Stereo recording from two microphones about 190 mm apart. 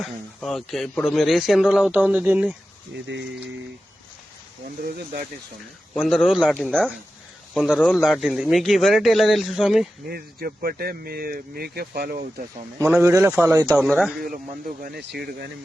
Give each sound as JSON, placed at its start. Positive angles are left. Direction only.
{"t": 0.0, "sound": "speech", "side_deg": 0}
{"t": 5.9, "sound": "speech", "side_deg": 0}
{"t": 10.1, "sound": "speech", "side_deg": -55}
{"t": 12.8, "sound": "speech", "side_deg": -10}
{"t": 13.7, "sound": "speech", "side_deg": -5}
{"t": 14.8, "sound": "speech", "side_deg": -60}